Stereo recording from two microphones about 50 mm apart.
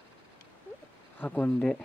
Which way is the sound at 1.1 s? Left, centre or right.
Left.